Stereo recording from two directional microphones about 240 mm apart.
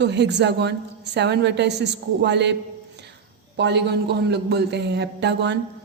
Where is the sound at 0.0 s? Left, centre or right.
Right.